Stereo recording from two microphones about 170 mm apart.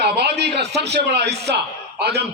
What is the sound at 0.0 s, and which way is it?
A man's voice, 75° right (ahead or behind).